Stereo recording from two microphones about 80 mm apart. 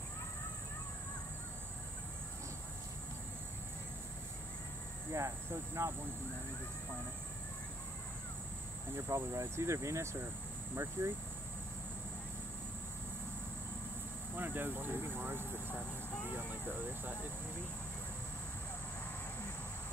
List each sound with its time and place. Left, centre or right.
5.1 s speech: right
8.9 s speech: right
14.3 s speech: right